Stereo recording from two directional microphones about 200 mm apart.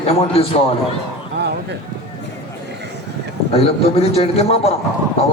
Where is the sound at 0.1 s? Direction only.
30° left (ahead or behind).